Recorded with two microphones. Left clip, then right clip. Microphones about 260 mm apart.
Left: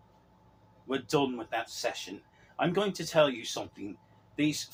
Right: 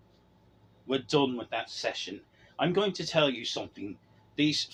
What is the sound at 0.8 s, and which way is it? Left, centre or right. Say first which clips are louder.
Speech: right 2 dB; right.